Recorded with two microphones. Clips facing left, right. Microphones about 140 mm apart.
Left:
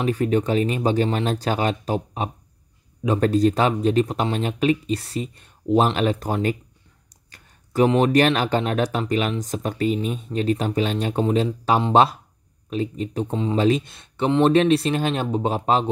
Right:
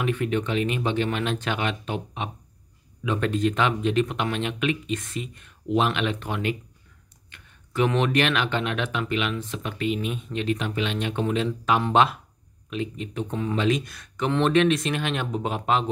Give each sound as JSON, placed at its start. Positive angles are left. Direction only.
{"t": 0.0, "sound": "speech", "side_deg": 35}